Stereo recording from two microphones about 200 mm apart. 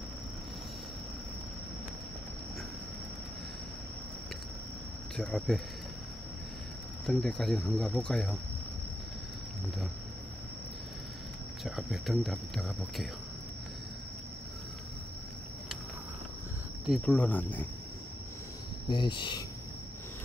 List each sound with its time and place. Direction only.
5.1 s speech: centre (ahead or behind)
7.1 s speech: 5° left (ahead or behind)
11.6 s speech: centre (ahead or behind)
16.8 s speech: centre (ahead or behind)
18.9 s speech: 25° left (ahead or behind)